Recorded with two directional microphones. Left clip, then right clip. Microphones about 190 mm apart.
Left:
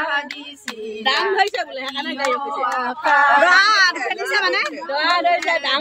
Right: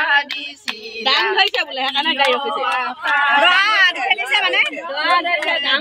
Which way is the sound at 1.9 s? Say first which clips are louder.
Right 8 dB; 30° right (ahead or behind).